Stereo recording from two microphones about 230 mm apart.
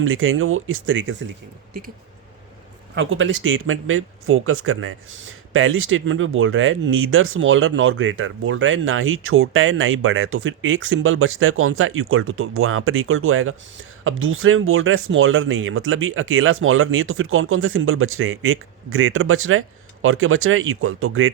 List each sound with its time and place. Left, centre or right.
0.0 s speech: right
2.9 s speech: right